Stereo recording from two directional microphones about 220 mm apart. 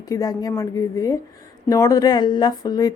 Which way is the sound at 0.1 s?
15° left (ahead or behind).